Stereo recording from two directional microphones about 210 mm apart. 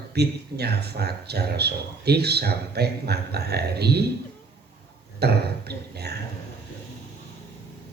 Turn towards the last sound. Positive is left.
turn(degrees=-50)  # may be behind; listen again after turning